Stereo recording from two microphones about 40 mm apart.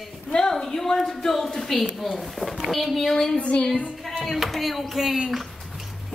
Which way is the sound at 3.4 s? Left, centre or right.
Left.